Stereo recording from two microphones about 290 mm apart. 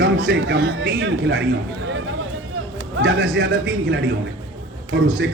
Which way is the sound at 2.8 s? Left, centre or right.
Right.